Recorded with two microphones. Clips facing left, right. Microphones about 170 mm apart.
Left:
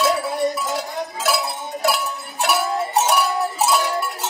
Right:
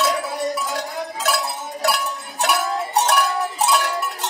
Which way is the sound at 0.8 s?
5° left (ahead or behind).